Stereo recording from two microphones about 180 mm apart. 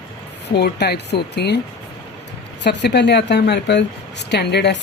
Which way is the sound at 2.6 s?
70° left (ahead or behind).